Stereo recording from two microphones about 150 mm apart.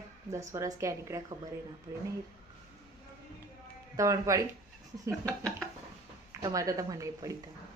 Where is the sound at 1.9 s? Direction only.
30° right (ahead or behind).